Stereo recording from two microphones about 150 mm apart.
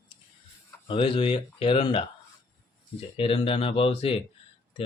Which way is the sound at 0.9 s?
35° left (ahead or behind).